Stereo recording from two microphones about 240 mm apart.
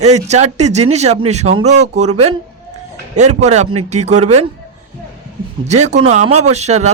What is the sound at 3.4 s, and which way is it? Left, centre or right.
A man's voice, right.